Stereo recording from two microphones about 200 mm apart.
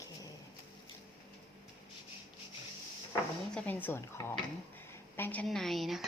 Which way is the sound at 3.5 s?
10° left (ahead or behind).